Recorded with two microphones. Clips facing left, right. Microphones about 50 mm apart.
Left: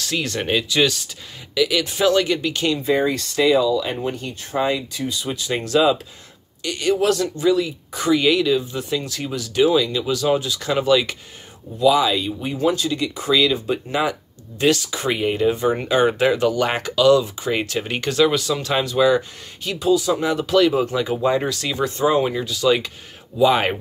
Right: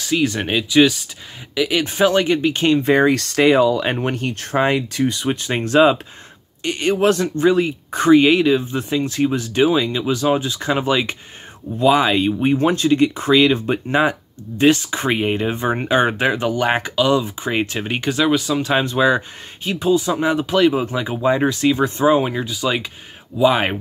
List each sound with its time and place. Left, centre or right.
0.0 s speech: centre; by 2.8 s right
2.8 s speech: right
11.8 s speech: right; by 18.8 s centre
18.8 s speech: right